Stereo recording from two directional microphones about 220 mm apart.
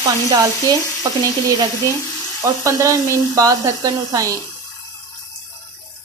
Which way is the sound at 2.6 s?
15° right (ahead or behind).